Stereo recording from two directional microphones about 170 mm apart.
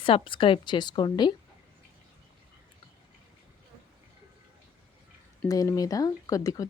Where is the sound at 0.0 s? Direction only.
30° left (ahead or behind).